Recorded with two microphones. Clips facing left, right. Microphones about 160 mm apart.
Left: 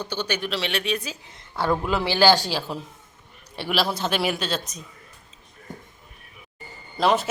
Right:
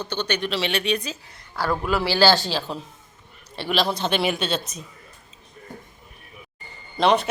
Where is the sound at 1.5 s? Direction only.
20° left (ahead or behind); by 4.8 s centre (ahead or behind).